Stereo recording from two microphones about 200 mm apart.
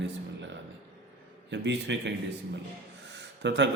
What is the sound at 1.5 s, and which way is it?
Speech, 60° right (ahead or behind).